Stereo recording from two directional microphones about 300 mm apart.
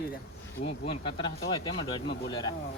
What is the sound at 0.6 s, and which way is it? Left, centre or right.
Speech, centre.